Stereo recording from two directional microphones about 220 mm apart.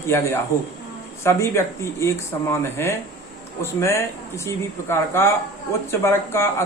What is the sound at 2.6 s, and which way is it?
Speech, 10° left (ahead or behind).